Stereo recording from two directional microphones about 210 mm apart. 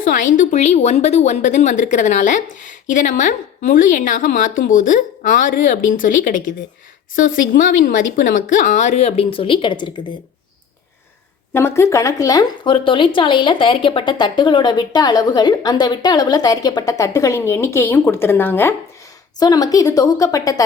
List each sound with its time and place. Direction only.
0.3 s a woman's voice: 30° left (ahead or behind)
11.5 s speech: 10° left (ahead or behind)